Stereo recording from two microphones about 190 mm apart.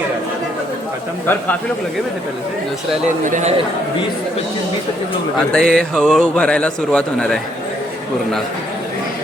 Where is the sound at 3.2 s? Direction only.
40° right (ahead or behind).